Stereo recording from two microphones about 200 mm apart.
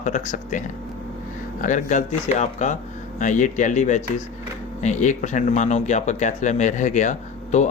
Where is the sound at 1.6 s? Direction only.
40° left (ahead or behind).